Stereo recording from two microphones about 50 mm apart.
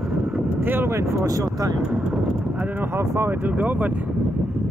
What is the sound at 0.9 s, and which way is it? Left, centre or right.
Speech, right.